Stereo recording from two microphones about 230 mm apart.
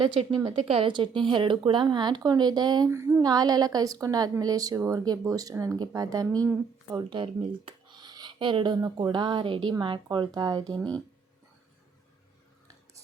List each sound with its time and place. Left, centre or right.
0.0 s speech: right